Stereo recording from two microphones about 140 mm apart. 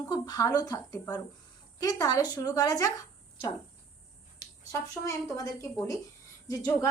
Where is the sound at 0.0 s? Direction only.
25° left (ahead or behind).